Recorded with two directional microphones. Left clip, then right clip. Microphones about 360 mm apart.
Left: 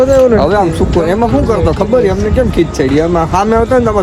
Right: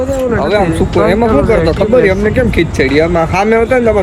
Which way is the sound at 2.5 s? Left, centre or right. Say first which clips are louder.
Right 1 dB; centre.